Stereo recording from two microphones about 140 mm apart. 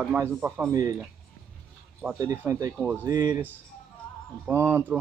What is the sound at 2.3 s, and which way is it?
Speech, 20° right (ahead or behind).